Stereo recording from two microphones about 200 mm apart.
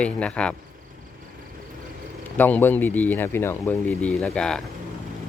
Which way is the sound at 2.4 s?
10° left (ahead or behind).